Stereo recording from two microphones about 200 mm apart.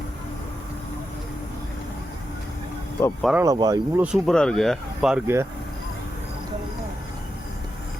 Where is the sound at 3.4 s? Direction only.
20° right (ahead or behind).